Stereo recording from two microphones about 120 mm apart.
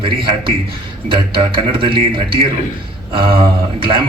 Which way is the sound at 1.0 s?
45° right (ahead or behind).